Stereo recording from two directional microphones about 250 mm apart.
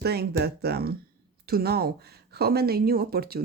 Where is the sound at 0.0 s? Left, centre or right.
Right.